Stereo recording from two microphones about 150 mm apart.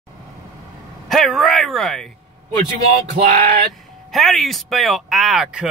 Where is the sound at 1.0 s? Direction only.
Centre (ahead or behind).